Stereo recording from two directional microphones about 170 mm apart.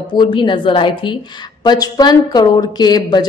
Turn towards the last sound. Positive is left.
turn(degrees=25)  # may be behind; listen again after turning